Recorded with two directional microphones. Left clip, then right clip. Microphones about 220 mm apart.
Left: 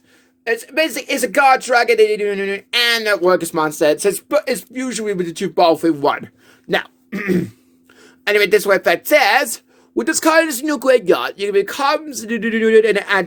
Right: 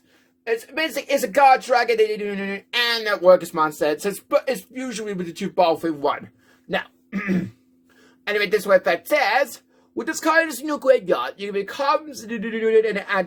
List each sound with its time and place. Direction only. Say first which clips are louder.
0.4 s speech: left 6 dB; 40° left (ahead or behind)